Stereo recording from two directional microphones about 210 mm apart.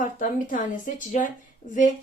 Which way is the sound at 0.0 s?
40° left (ahead or behind).